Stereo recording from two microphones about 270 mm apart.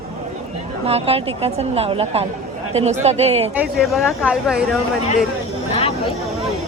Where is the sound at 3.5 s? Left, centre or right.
Centre.